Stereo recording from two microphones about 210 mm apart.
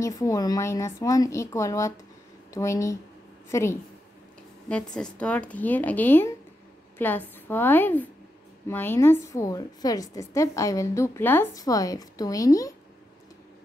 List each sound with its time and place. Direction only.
0.0 s a woman's voice: 15° left (ahead or behind)